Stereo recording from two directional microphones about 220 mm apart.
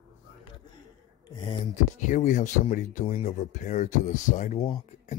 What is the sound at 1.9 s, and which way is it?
Speech, 35° left (ahead or behind).